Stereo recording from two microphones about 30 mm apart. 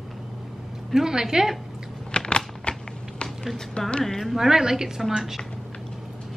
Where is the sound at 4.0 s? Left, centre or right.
Centre.